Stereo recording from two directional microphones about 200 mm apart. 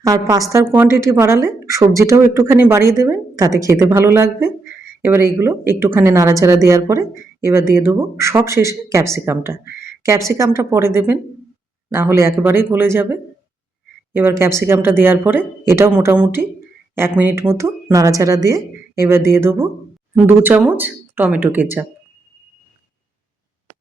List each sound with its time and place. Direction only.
0.0 s speech: 15° right (ahead or behind)